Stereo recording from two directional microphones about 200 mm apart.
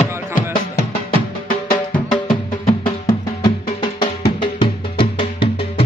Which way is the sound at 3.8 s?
25° left (ahead or behind).